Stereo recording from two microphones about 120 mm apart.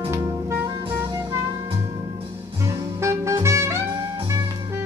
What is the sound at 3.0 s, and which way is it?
Music, 25° right (ahead or behind).